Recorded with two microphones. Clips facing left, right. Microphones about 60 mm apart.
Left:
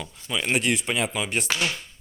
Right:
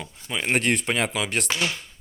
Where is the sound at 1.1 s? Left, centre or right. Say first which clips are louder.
Right 1 dB; right.